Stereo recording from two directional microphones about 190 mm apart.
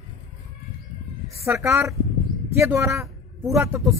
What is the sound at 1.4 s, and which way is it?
A woman's voice, 15° right (ahead or behind).